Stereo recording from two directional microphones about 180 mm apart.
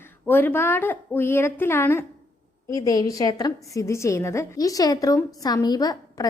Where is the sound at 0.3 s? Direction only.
10° left (ahead or behind).